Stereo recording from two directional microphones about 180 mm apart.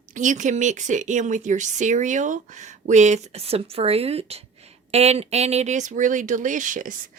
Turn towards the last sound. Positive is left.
turn(degrees=-45)  # may be behind; listen again after turning